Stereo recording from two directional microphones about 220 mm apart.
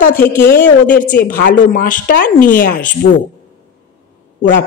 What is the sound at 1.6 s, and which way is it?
Speech, 40° left (ahead or behind).